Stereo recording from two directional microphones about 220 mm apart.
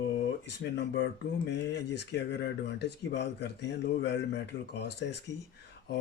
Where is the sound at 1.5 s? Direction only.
50° left (ahead or behind).